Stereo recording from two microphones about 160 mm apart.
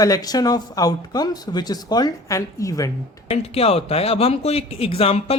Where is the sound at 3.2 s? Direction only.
40° left (ahead or behind).